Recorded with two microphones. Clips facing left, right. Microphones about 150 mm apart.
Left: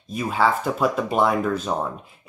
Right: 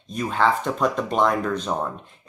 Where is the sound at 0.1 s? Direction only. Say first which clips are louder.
Even; 5° left (ahead or behind).